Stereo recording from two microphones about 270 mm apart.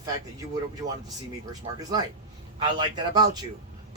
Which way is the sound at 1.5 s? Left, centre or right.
Centre.